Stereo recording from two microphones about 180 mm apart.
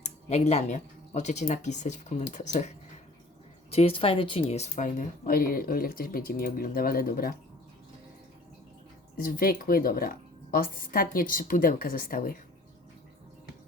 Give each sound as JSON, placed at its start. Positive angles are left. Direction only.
{"t": 0.0, "sound": "speech", "side_deg": 40}
{"t": 9.1, "sound": "speech", "side_deg": 55}